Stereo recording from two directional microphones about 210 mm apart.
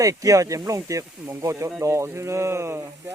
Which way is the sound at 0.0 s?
15° right (ahead or behind).